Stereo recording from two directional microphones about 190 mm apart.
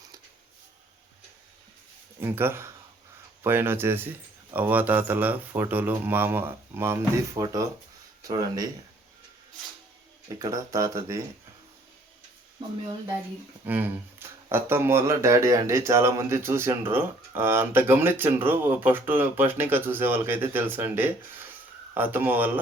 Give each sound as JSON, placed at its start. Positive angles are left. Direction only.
{"t": 2.2, "sound": "speech", "side_deg": -10}
{"t": 10.2, "sound": "speech", "side_deg": -20}
{"t": 13.7, "sound": "speech", "side_deg": -10}